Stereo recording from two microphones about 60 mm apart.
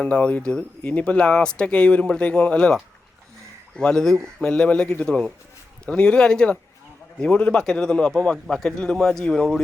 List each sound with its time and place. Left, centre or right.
0.0 s speech: left
3.8 s speech: centre